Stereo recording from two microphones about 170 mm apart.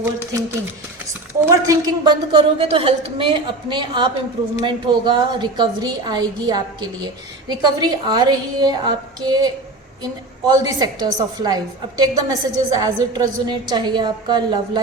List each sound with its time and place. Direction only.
0.0 s a woman's voice: 15° right (ahead or behind)
10.5 s a woman's voice: 20° right (ahead or behind)